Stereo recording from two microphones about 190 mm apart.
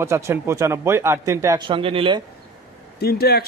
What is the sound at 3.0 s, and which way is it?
Speech, 55° left (ahead or behind).